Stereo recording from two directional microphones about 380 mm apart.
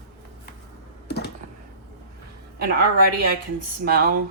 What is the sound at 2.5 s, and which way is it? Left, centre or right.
Speech, right.